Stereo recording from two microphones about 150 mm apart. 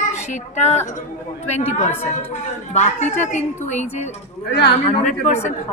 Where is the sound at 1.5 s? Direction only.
50° left (ahead or behind).